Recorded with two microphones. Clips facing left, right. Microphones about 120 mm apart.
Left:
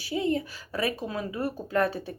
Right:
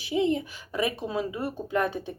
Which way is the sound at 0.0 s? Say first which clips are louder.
Right 2 dB; 20° right (ahead or behind).